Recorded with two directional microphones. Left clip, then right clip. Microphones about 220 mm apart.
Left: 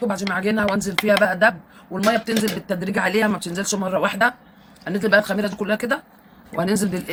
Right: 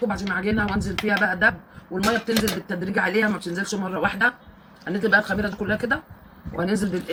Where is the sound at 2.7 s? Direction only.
55° left (ahead or behind).